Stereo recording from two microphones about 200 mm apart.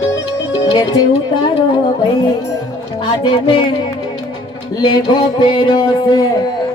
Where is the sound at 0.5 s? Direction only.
20° left (ahead or behind).